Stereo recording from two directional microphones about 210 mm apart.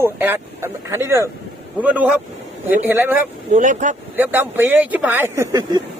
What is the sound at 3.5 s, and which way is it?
Speech, 35° right (ahead or behind).